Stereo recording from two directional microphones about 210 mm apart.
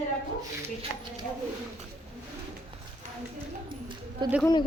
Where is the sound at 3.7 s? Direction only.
25° right (ahead or behind).